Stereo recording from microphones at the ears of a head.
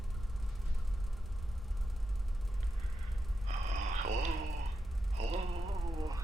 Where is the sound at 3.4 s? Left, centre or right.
Right.